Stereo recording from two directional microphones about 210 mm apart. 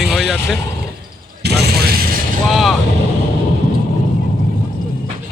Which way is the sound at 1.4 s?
50° right (ahead or behind).